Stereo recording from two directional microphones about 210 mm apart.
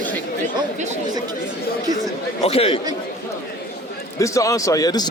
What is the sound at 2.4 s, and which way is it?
Speech, 25° left (ahead or behind).